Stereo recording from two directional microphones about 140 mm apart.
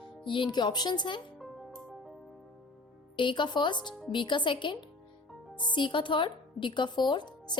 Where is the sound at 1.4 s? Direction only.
Centre (ahead or behind).